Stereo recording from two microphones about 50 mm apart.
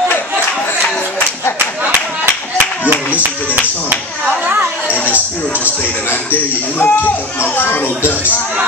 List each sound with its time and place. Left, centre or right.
2.9 s a sound: right
4.5 s chatter: right
6.3 s speech: left